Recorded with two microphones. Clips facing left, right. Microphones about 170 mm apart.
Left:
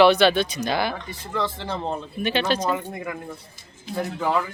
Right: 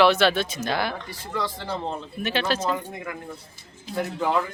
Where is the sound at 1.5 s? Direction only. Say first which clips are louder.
Left 1 dB; 25° left (ahead or behind).